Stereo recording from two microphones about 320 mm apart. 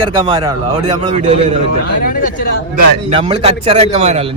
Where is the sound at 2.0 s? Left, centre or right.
Left.